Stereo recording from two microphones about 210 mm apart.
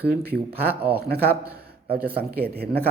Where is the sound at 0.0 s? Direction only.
50° right (ahead or behind).